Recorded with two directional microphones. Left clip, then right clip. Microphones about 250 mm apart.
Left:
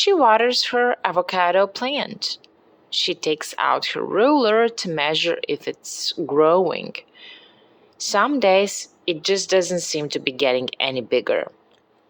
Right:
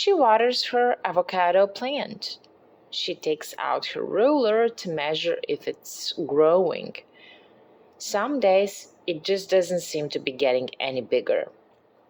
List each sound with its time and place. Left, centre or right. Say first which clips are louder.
0.0 s speech: left 3 dB; centre